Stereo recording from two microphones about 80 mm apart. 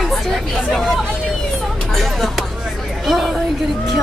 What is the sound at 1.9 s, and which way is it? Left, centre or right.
Vehicle, centre.